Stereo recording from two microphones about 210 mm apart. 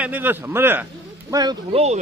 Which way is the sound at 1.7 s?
30° right (ahead or behind).